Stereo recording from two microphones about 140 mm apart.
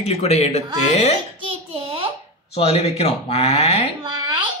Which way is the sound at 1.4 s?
40° right (ahead or behind).